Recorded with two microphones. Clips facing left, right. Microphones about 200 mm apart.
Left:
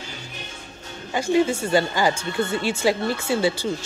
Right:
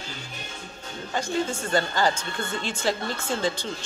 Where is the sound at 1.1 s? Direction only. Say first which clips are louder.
Left 7 dB; 10° left (ahead or behind).